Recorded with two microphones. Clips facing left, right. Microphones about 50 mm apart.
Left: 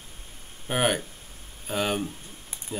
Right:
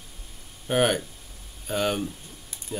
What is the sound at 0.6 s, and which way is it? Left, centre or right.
Speech, centre.